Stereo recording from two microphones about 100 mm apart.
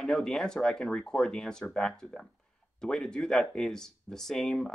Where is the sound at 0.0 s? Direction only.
5° left (ahead or behind).